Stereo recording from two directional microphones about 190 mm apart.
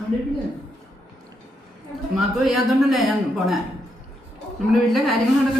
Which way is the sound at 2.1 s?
Centre (ahead or behind).